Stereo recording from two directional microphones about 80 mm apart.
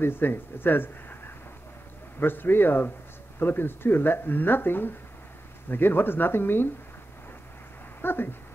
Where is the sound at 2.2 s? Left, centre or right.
Left.